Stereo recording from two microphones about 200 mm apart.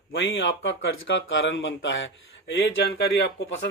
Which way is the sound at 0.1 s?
60° left (ahead or behind).